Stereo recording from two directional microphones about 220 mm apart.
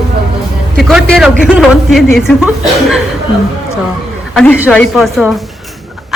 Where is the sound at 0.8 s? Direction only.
Centre (ahead or behind).